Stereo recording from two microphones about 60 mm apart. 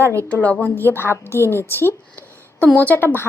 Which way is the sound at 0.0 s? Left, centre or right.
Right.